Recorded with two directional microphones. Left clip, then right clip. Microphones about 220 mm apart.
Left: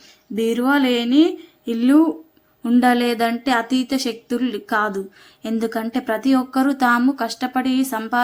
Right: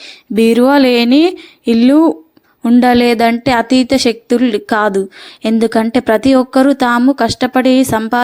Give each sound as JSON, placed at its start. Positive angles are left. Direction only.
{"t": 0.3, "sound": "speech", "side_deg": -35}